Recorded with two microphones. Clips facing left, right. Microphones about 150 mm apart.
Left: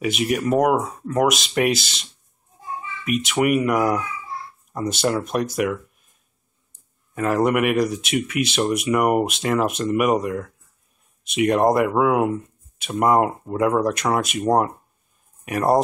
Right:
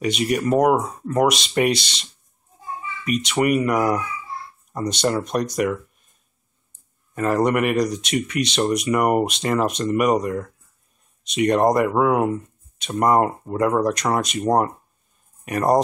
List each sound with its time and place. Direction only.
0.0 s speech: 5° left (ahead or behind)
3.1 s speech: 5° left (ahead or behind)
7.2 s speech: 5° left (ahead or behind)